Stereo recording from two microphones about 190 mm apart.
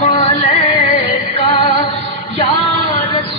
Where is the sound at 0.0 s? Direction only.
30° left (ahead or behind).